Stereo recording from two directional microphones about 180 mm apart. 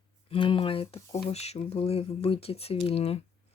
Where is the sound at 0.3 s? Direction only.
30° left (ahead or behind).